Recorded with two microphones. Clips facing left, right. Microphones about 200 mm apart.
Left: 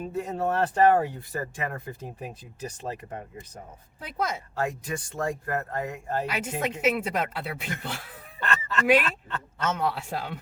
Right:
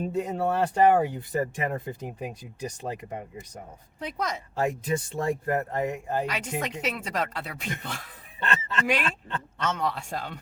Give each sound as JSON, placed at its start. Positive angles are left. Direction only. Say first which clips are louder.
{"t": 0.0, "sound": "speech", "louder": "right 2 dB", "side_deg": -20}
{"t": 4.0, "sound": "speech", "louder": "left 1 dB", "side_deg": 5}
{"t": 4.5, "sound": "speech", "louder": "right 3 dB", "side_deg": -20}
{"t": 6.2, "sound": "speech", "louder": "left 1 dB", "side_deg": 5}
{"t": 8.4, "sound": "fowl", "louder": "even", "side_deg": -25}
{"t": 9.6, "sound": "speech", "louder": "left 2 dB", "side_deg": 5}